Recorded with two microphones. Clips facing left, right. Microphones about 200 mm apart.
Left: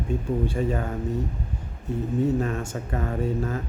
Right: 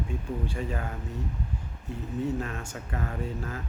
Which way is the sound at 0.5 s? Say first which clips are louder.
Left 7 dB; 30° left (ahead or behind).